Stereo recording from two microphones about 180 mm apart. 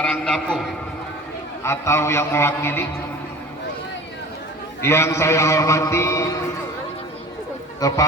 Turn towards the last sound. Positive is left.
turn(degrees=20)  # may be behind; listen again after turning